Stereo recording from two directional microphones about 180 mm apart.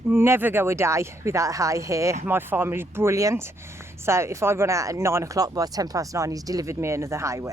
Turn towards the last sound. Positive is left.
turn(degrees=-15)  # may be behind; listen again after turning